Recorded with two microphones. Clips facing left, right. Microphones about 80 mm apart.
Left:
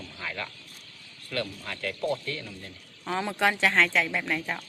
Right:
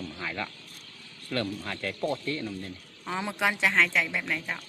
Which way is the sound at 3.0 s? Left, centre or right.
Centre.